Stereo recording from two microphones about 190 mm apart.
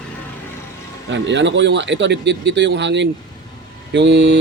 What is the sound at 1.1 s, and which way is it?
A man's voice, 70° right (ahead or behind).